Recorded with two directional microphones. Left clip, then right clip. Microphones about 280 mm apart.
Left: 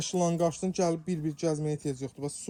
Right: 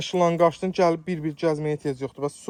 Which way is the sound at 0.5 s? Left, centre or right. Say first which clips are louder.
Right 5 dB; right.